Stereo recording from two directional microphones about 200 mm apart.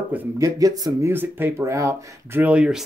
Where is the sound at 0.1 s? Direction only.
15° right (ahead or behind).